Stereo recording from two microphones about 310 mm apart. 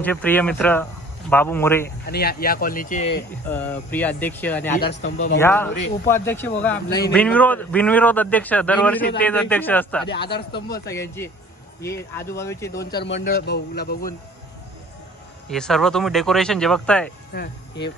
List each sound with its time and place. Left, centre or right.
0.0 s a man's voice: centre
2.0 s speech: left
3.3 s a man's voice: centre
4.7 s speech: left
5.4 s a man's voice: centre
10.0 s speech: left
10.9 s speech: centre
12.9 s speech: left
15.5 s a man's voice: centre
17.3 s speech: left